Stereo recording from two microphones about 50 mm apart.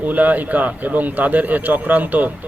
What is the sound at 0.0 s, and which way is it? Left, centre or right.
A man's voice, right.